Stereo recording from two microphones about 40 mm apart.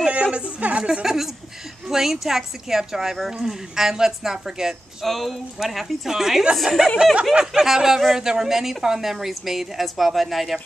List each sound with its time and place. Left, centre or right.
0.1 s a sound: right
1.0 s a woman's voice: centre
5.0 s a woman's voice: centre